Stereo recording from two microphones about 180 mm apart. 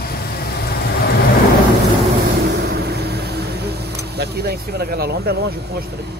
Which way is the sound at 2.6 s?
65° right (ahead or behind).